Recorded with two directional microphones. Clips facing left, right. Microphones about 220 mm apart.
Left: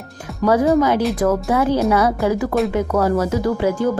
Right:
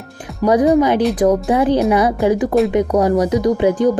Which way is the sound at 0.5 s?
15° right (ahead or behind).